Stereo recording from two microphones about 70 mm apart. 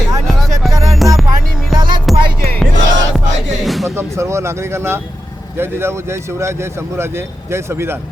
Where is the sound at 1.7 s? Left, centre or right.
Right.